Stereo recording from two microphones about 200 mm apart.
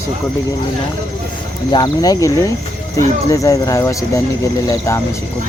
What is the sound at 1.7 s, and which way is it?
Speech, 20° left (ahead or behind).